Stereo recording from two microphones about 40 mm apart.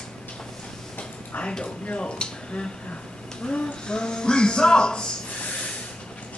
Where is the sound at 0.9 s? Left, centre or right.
Left.